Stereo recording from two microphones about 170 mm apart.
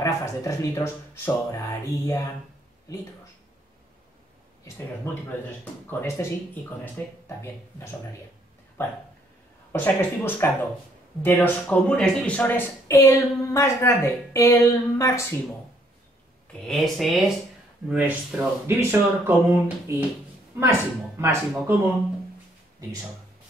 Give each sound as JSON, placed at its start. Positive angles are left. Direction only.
{"t": 0.0, "sound": "a woman's voice", "side_deg": 20}
{"t": 5.1, "sound": "a woman's voice", "side_deg": 15}
{"t": 9.7, "sound": "a woman's voice", "side_deg": 10}
{"t": 16.6, "sound": "speech", "side_deg": 0}